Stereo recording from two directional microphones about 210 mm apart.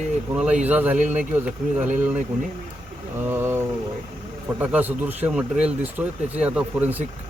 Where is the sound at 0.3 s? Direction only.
5° right (ahead or behind).